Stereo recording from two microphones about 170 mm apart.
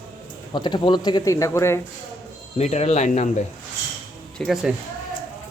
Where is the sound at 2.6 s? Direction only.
40° left (ahead or behind).